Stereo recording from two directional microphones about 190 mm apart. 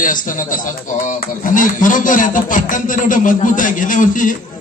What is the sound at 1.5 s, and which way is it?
A man's voice, 45° left (ahead or behind).